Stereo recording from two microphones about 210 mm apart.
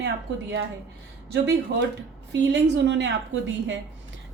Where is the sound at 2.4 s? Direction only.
55° right (ahead or behind).